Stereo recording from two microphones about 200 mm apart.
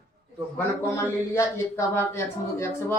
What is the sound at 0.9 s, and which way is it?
Speech, 15° left (ahead or behind).